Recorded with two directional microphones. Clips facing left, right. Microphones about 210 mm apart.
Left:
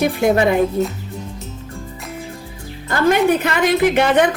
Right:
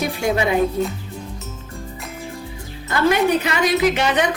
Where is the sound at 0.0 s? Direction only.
50° left (ahead or behind).